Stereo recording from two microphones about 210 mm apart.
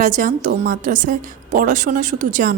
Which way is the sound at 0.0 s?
40° right (ahead or behind).